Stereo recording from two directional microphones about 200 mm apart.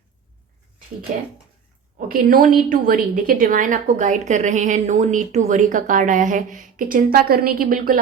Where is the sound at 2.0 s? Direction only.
45° right (ahead or behind).